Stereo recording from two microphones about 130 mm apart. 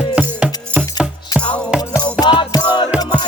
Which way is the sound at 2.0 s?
35° left (ahead or behind).